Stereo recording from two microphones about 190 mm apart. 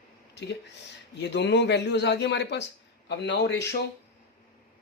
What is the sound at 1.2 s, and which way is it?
Speech, 65° left (ahead or behind).